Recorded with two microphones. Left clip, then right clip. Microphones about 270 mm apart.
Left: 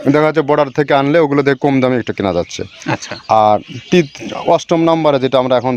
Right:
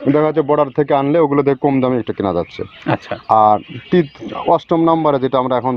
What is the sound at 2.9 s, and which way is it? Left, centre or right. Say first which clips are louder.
Speech: right 1 dB; centre.